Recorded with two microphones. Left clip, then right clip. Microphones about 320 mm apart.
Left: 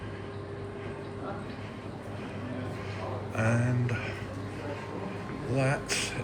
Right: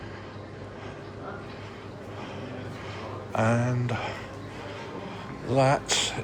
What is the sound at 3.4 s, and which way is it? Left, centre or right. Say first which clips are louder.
Speech: right 5 dB; centre.